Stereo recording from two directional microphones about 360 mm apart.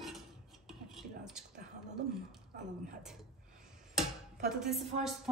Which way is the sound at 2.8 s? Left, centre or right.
Centre.